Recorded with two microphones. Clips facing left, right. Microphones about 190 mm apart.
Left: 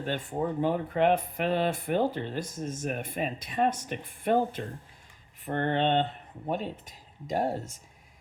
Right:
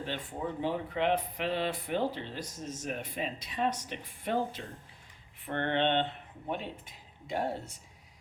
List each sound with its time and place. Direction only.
0.6 s speech: 50° left (ahead or behind)
5.5 s speech: 40° left (ahead or behind)